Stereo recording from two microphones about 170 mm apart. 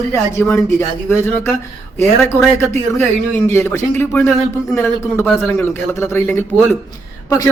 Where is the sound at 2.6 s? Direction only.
15° left (ahead or behind).